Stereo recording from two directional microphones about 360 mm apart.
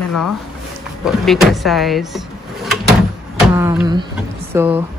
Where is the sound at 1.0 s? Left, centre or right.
Centre.